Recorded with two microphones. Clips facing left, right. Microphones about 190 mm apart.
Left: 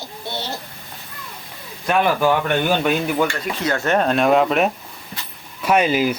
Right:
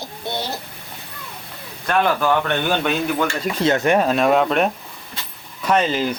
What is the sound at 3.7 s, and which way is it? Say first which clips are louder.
Speech: right 2 dB; 15° right (ahead or behind).